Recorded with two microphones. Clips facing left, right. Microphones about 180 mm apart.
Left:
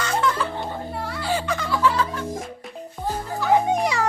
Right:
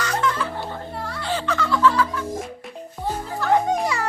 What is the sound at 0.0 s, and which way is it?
Music, 25° left (ahead or behind).